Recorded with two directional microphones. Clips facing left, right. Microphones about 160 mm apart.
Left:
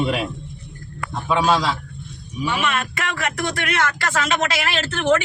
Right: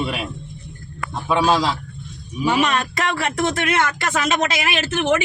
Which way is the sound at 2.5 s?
35° right (ahead or behind).